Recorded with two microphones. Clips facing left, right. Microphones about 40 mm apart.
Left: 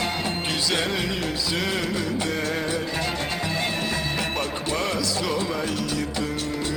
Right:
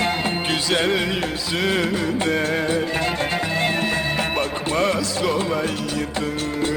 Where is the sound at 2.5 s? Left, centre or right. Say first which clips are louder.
Right 5 dB; right.